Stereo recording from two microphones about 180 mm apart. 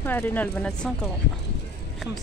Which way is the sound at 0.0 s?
10° left (ahead or behind).